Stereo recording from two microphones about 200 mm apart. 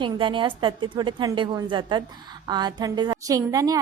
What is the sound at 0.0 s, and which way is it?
A woman's voice, 25° right (ahead or behind).